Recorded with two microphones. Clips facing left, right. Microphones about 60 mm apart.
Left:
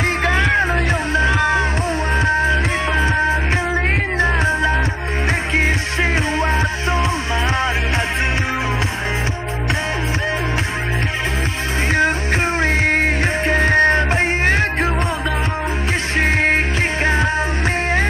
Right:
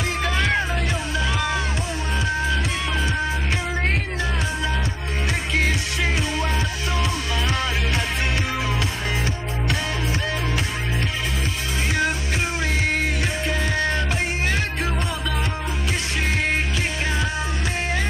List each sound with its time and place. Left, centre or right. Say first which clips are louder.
0.2 s music: left 5 dB; left
6.3 s music: left 6 dB; left
12.5 s music: left 6 dB; left
16.2 s music: left 8 dB; left